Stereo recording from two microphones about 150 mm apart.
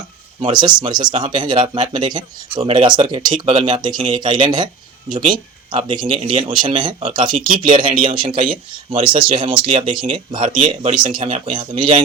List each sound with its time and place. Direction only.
0.4 s speech: 30° right (ahead or behind)
7.3 s speech: 65° right (ahead or behind)
7.6 s speech: 30° right (ahead or behind)